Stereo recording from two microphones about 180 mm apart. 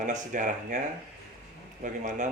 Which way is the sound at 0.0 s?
45° right (ahead or behind).